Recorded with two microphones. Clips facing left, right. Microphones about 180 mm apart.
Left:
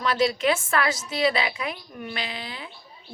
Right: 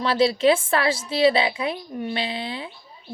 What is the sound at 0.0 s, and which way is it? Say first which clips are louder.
A woman's voice: right 4 dB; 30° right (ahead or behind).